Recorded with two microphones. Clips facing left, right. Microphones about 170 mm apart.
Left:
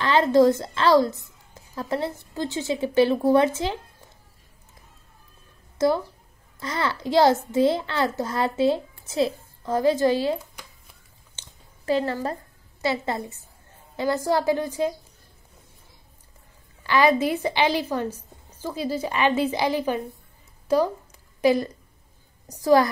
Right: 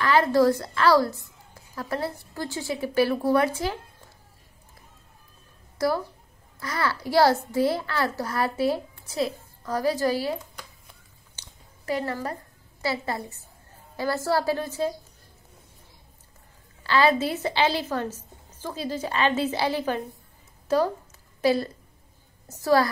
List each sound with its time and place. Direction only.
0.0 s a woman's voice: 25° left (ahead or behind)
5.8 s a woman's voice: 20° left (ahead or behind)
11.3 s a sound: 25° left (ahead or behind)
12.8 s a woman's voice: 20° left (ahead or behind)
16.8 s a woman's voice: 15° left (ahead or behind)